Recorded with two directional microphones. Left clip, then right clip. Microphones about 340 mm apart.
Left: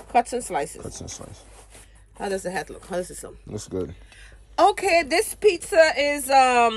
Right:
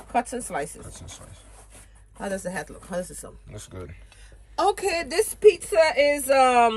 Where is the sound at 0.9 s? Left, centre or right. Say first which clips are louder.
Left 6 dB; left.